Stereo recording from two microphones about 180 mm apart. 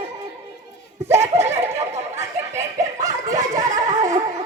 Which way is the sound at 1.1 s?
35° right (ahead or behind).